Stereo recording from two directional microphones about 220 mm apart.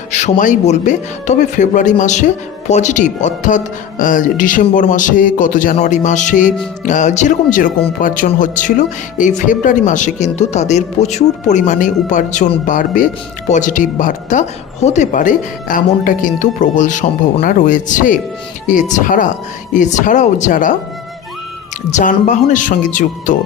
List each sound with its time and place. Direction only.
0.1 s speech: 35° left (ahead or behind)
21.9 s speech: 35° left (ahead or behind)